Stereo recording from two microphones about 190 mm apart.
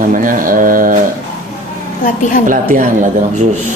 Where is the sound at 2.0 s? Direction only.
45° left (ahead or behind).